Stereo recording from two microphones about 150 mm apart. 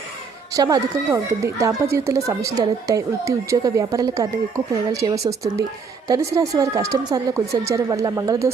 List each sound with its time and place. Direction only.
0.5 s speech: 25° right (ahead or behind)